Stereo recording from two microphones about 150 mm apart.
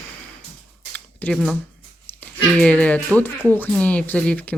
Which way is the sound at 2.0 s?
10° left (ahead or behind).